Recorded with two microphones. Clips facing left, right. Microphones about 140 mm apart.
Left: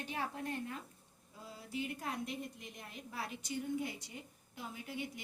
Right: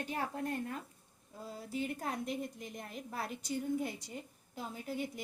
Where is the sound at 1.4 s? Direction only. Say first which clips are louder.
Right 3 dB; 40° right (ahead or behind).